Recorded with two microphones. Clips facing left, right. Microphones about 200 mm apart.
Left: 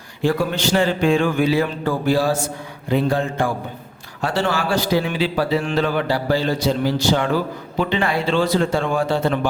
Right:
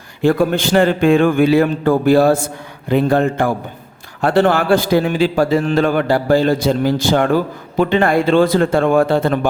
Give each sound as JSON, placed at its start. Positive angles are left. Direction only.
{"t": 0.2, "sound": "a man's voice", "side_deg": -55}